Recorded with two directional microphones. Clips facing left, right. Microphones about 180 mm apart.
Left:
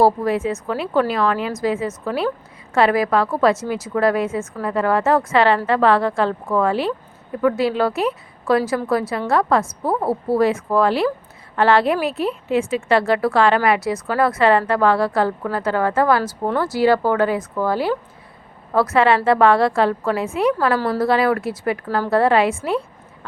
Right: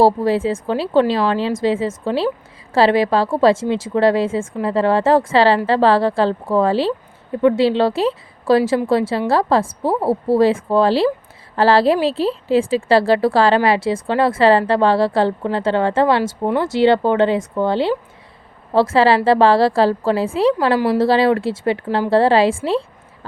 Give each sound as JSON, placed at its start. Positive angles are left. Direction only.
{"t": 0.0, "sound": "a woman's voice", "side_deg": -30}
{"t": 20.7, "sound": "speech", "side_deg": -15}
{"t": 21.0, "sound": "a woman's voice", "side_deg": -30}